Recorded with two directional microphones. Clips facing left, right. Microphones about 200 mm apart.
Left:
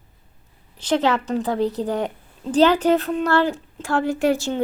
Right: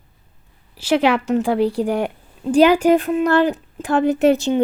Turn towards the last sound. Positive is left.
turn(degrees=-20)  # may be behind; listen again after turning